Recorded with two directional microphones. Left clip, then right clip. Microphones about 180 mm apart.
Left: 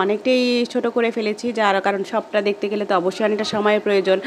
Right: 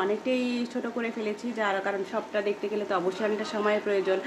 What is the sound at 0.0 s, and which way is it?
Speech, 55° left (ahead or behind).